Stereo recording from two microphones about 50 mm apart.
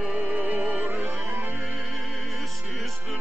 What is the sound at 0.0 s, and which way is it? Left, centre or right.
Music, right.